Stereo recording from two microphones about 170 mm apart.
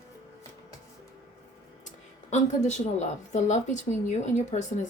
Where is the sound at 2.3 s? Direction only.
45° left (ahead or behind).